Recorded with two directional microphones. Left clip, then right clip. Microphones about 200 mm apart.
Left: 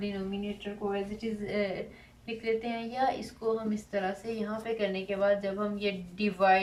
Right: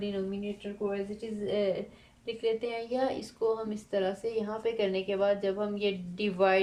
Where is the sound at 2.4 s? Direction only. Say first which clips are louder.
Right 1 dB; 45° right (ahead or behind).